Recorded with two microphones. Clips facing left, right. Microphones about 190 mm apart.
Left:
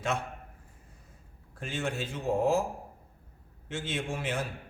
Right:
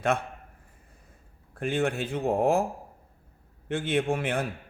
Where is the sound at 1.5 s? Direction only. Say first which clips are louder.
Right 7 dB; 60° right (ahead or behind).